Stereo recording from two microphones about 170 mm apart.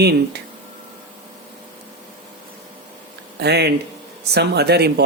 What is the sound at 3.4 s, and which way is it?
Speech, 75° right (ahead or behind).